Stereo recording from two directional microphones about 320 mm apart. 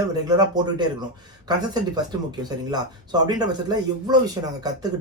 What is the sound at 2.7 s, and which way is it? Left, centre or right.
Speech, centre.